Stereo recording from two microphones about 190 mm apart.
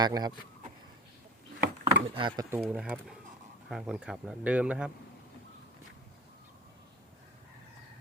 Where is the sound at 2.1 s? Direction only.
25° right (ahead or behind).